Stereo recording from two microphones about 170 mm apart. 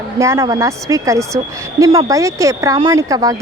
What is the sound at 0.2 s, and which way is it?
A woman's voice, 15° right (ahead or behind).